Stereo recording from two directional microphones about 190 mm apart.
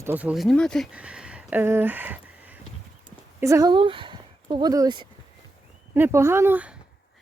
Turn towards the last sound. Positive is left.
turn(degrees=-10)  # may be behind; listen again after turning